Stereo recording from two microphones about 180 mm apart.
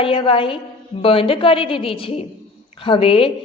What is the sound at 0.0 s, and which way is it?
A woman's voice, 30° left (ahead or behind).